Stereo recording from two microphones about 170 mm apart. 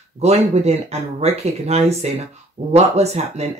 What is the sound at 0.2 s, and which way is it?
Speech, 40° right (ahead or behind).